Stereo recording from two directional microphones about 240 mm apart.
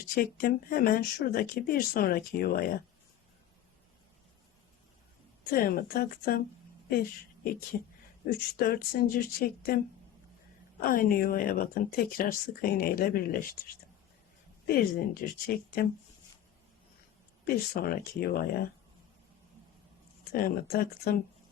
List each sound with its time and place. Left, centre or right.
0.2 s speech: left
5.5 s speech: left
7.7 s speech: left
10.8 s speech: left
14.7 s speech: left
17.4 s speech: left
20.3 s speech: left